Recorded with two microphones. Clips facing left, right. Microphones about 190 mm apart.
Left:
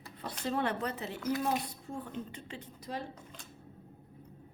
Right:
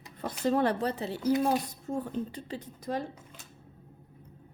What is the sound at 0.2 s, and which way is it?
A woman's voice, 45° right (ahead or behind).